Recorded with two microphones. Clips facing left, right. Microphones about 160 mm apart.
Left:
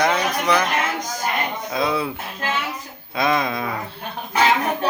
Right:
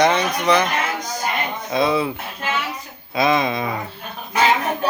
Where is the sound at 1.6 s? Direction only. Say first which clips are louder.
Right 5 dB; centre (ahead or behind).